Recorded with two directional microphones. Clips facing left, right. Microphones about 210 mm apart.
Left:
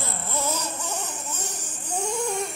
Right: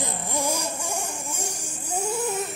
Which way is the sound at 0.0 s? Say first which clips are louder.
Right 2 dB; 15° right (ahead or behind).